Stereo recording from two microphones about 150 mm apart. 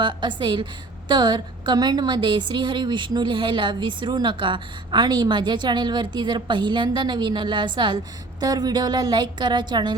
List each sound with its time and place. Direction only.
0.0 s a woman's voice: 30° right (ahead or behind)